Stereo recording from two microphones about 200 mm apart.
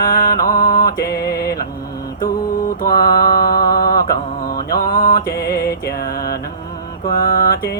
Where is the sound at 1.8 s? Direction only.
20° left (ahead or behind).